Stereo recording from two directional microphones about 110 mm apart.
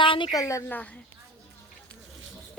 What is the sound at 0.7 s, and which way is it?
Speech, 15° left (ahead or behind).